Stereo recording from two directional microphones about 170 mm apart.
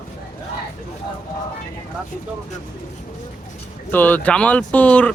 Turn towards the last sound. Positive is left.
turn(degrees=10)  # may be behind; listen again after turning